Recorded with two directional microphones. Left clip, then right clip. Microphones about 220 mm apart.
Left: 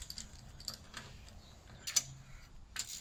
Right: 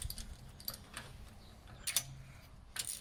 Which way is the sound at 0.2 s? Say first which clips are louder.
Left 3 dB; centre (ahead or behind).